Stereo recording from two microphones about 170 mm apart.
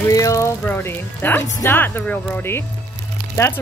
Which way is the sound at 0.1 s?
20° left (ahead or behind).